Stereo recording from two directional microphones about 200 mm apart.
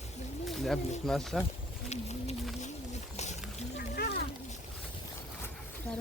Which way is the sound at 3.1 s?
35° left (ahead or behind).